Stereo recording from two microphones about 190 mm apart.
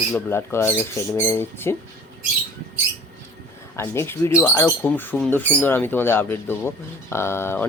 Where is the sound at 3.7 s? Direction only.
15° left (ahead or behind).